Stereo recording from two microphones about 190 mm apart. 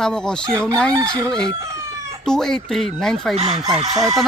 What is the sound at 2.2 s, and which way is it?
Speech, 5° left (ahead or behind).